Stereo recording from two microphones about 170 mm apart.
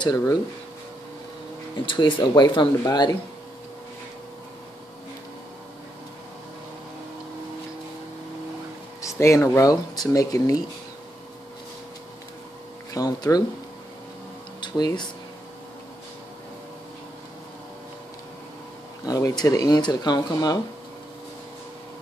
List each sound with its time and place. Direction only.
0.0 s speech: 20° left (ahead or behind)
1.9 s speech: 30° left (ahead or behind)
9.0 s speech: 15° left (ahead or behind)
12.9 s speech: 20° left (ahead or behind)
14.6 s speech: 25° left (ahead or behind)
19.0 s speech: 20° left (ahead or behind)